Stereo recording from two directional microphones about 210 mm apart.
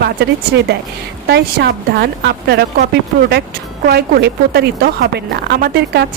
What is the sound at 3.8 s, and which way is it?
A woman's voice, 50° right (ahead or behind).